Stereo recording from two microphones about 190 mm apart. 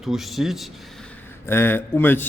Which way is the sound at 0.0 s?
Centre (ahead or behind).